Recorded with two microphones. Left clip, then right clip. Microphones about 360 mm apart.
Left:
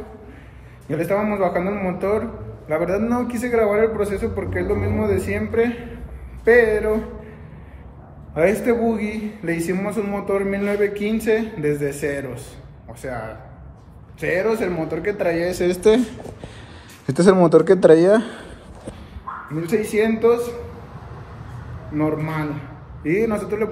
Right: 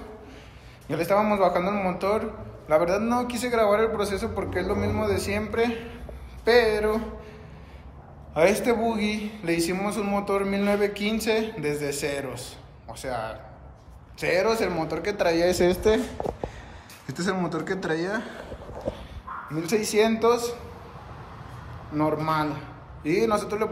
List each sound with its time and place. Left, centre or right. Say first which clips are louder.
0.8 s a man's voice: left 1 dB; centre
8.4 s a man's voice: left 3 dB; centre
15.4 s speech: even; right
17.5 s speech: left 16 dB; centre
19.5 s a man's voice: left 3 dB; centre
21.9 s a man's voice: left 1 dB; centre